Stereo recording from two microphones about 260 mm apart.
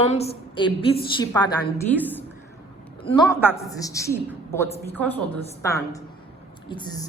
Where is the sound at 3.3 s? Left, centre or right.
Centre.